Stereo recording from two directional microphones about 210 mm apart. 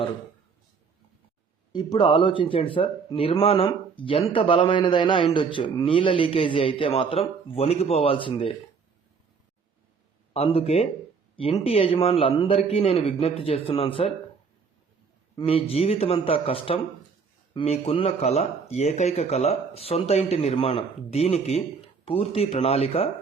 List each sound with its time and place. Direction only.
1.7 s a man's voice: 20° left (ahead or behind)
10.3 s a man's voice: 30° left (ahead or behind)
15.4 s a man's voice: 25° left (ahead or behind)